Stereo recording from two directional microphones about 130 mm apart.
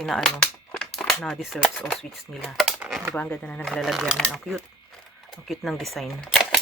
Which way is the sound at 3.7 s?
Centre (ahead or behind).